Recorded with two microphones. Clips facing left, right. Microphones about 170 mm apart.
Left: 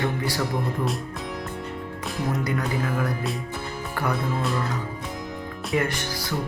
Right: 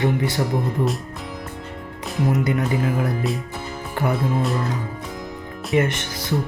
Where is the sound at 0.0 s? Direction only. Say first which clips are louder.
Right 5 dB; 20° right (ahead or behind).